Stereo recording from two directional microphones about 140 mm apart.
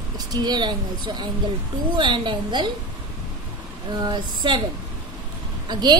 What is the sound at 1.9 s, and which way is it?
Speech, 35° right (ahead or behind).